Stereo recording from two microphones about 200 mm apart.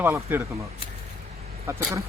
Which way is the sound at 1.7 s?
15° right (ahead or behind).